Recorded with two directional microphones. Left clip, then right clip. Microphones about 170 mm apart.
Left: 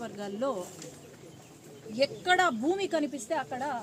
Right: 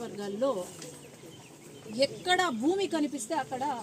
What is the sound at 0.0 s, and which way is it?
Speech, 5° left (ahead or behind).